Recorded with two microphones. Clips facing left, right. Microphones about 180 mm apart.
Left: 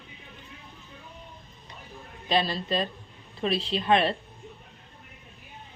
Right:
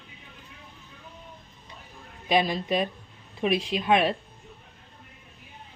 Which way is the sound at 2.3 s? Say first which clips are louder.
Right 2 dB; 15° right (ahead or behind).